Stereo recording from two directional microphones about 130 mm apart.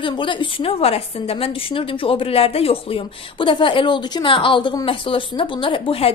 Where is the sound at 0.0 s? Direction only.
40° left (ahead or behind).